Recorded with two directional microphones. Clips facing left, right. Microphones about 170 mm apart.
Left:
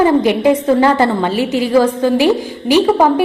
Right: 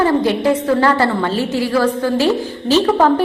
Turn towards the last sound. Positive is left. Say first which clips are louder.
# left 2 dB
turn(degrees=10)  # may be behind; listen again after turning